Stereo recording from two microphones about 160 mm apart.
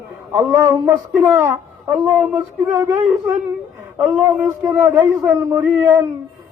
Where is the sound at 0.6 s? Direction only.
15° right (ahead or behind).